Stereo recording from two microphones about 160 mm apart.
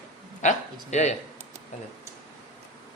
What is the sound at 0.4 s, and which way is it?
Speech, 45° left (ahead or behind).